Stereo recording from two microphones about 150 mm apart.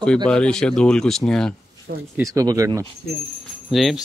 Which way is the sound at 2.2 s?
20° right (ahead or behind).